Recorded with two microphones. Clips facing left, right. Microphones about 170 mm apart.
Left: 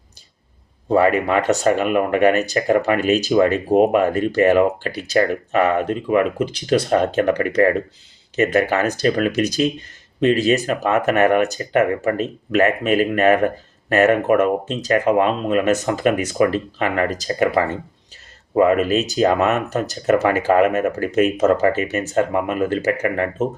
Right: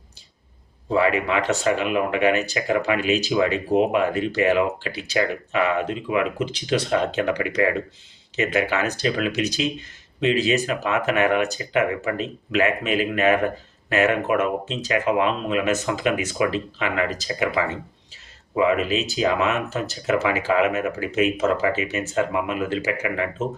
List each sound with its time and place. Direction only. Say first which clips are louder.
0.9 s speech: left 4 dB; 45° left (ahead or behind)